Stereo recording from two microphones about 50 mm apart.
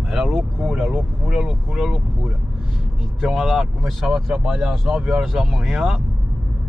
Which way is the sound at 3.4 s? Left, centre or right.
Centre.